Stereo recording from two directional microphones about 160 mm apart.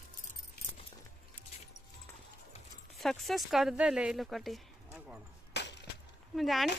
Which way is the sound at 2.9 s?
Centre (ahead or behind).